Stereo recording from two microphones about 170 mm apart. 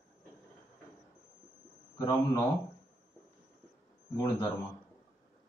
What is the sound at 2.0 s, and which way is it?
Speech, 20° left (ahead or behind).